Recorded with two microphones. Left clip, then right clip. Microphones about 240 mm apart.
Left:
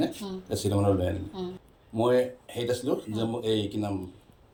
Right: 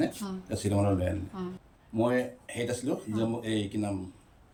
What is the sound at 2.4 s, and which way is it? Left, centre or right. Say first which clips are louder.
Speech: left 4 dB; centre.